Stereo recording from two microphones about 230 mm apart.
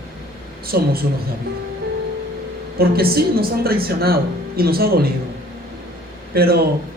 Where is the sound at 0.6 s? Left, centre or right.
Right.